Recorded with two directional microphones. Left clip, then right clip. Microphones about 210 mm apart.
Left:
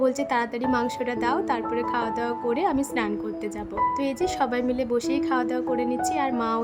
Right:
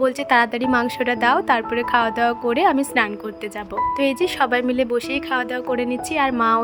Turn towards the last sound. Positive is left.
turn(degrees=-15)  # may be behind; listen again after turning